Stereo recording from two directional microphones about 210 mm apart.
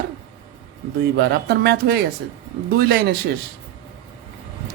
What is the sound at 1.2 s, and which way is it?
Speech, 50° right (ahead or behind).